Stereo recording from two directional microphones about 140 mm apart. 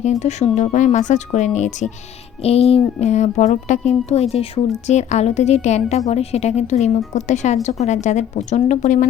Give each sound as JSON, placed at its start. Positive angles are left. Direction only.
{"t": 0.0, "sound": "a woman's voice", "side_deg": 55}